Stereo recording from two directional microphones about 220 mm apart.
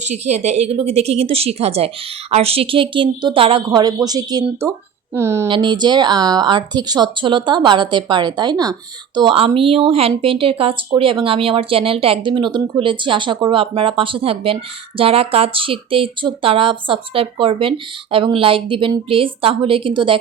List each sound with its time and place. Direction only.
0.0 s a woman's voice: 30° right (ahead or behind)